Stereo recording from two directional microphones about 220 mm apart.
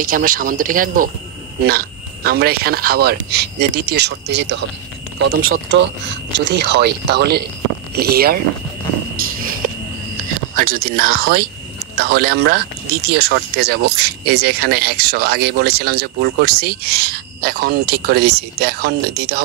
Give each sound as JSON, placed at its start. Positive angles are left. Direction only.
{"t": 0.0, "sound": "speech", "side_deg": -40}
{"t": 5.4, "sound": "speech", "side_deg": -65}
{"t": 9.4, "sound": "a sound", "side_deg": -40}
{"t": 12.0, "sound": "speech", "side_deg": -45}